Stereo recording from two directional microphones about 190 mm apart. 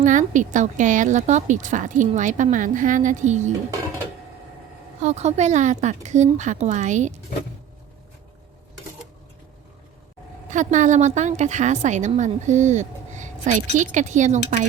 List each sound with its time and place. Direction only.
0.0 s a woman's voice: 40° right (ahead or behind)
5.0 s a woman's voice: 35° right (ahead or behind)
10.5 s a woman's voice: 40° right (ahead or behind)